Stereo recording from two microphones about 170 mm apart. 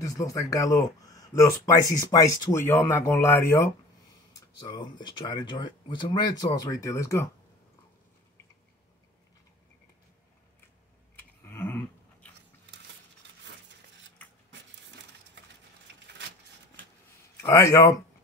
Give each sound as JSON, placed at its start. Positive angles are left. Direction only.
{"t": 0.0, "sound": "speech", "side_deg": 20}
{"t": 4.4, "sound": "a sound", "side_deg": 25}
{"t": 5.0, "sound": "speech", "side_deg": 25}
{"t": 11.1, "sound": "scissors", "side_deg": 15}
{"t": 17.4, "sound": "speech", "side_deg": 15}